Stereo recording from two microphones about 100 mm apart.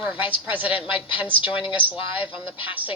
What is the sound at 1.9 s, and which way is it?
Speech, 65° left (ahead or behind).